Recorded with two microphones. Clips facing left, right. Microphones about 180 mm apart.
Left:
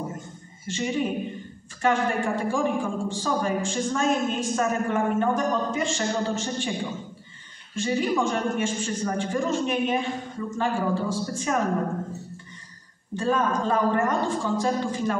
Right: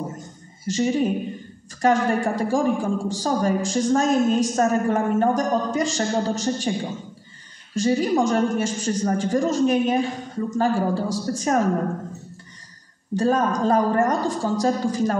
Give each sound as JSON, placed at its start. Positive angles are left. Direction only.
{"t": 0.7, "sound": "a woman's voice", "side_deg": -40}
{"t": 7.7, "sound": "a woman's voice", "side_deg": -40}
{"t": 13.1, "sound": "a woman's voice", "side_deg": -40}